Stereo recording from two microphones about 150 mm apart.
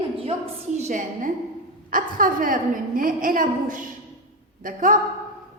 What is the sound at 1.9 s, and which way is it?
A woman's voice, 70° right (ahead or behind).